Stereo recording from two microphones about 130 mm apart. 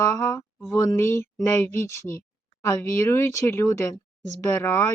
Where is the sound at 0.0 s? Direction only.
25° left (ahead or behind).